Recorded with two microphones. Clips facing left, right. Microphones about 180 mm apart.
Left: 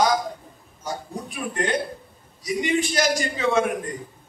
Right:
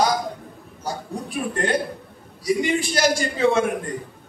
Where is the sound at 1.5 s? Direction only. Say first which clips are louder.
Right 1 dB; 35° right (ahead or behind).